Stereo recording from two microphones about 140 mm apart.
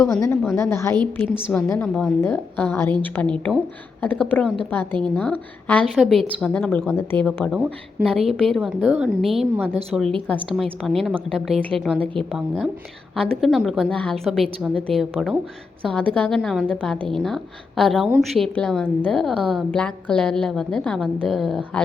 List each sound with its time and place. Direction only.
0.0 s a woman's voice: 20° left (ahead or behind)
1.9 s a woman's voice: centre (ahead or behind)
2.2 s a woman's voice: 15° left (ahead or behind)
5.9 s a woman's voice: centre (ahead or behind)
7.3 s a woman's voice: 15° left (ahead or behind)
7.5 s speech: 10° right (ahead or behind)
8.3 s a woman's voice: centre (ahead or behind)
10.2 s a woman's voice: 10° left (ahead or behind)
10.8 s a woman's voice: centre (ahead or behind)
11.9 s a woman's voice: 10° left (ahead or behind)